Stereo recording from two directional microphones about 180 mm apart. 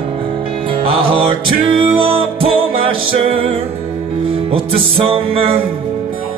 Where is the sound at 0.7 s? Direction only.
30° right (ahead or behind).